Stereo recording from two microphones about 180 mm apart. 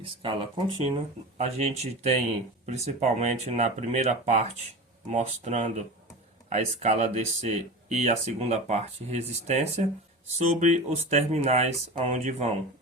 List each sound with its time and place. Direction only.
0.0 s speech: 30° right (ahead or behind)